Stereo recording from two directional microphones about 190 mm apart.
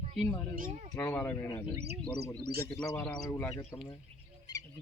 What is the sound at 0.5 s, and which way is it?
Speech, 45° right (ahead or behind).